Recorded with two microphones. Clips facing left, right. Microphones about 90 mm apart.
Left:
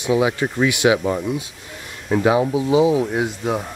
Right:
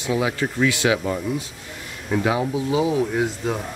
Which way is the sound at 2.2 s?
20° left (ahead or behind).